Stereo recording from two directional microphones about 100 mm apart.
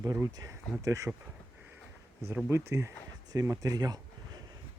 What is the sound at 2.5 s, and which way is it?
Speech, 25° right (ahead or behind).